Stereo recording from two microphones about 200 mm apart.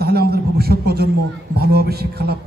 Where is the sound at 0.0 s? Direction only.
50° right (ahead or behind).